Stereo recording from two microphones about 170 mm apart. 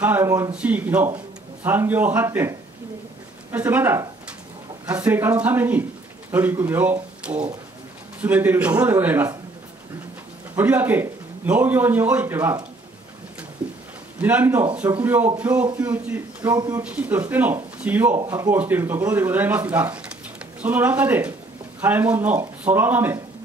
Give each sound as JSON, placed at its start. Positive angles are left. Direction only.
{"t": 0.0, "sound": "a man's voice", "side_deg": -15}
{"t": 3.5, "sound": "a man's voice", "side_deg": -10}
{"t": 10.5, "sound": "a man's voice", "side_deg": -10}
{"t": 14.2, "sound": "a man's voice", "side_deg": -10}
{"t": 16.5, "sound": "speech", "side_deg": -25}
{"t": 16.8, "sound": "a man's voice", "side_deg": -10}